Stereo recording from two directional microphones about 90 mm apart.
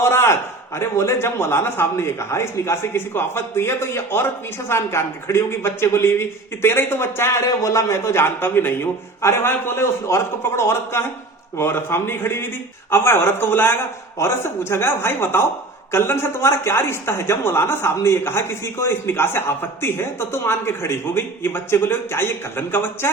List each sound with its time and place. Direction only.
0.0 s speech: 30° left (ahead or behind)